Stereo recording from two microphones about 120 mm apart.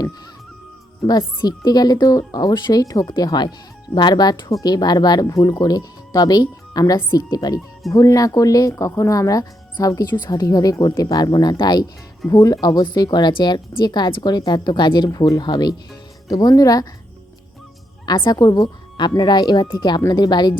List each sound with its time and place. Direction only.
1.0 s a woman's voice: 35° left (ahead or behind)
18.0 s a woman's voice: 35° left (ahead or behind)